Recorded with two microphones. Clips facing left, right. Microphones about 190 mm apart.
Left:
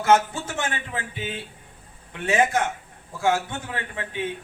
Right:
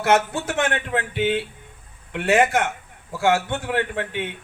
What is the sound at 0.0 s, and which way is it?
A man's voice, 70° right (ahead or behind).